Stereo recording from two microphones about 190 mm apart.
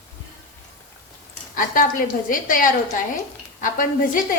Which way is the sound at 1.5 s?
45° left (ahead or behind).